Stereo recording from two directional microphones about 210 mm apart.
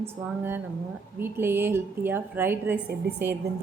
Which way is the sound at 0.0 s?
10° right (ahead or behind).